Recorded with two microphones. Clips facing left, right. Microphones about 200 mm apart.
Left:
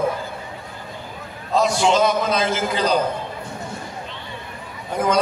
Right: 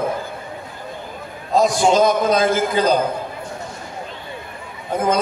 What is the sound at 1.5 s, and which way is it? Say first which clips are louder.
A man's voice: right 3 dB; 50° right (ahead or behind).